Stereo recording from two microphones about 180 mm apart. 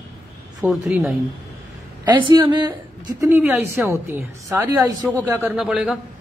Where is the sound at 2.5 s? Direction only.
25° right (ahead or behind).